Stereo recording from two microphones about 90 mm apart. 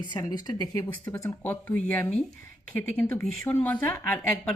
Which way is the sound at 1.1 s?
35° left (ahead or behind).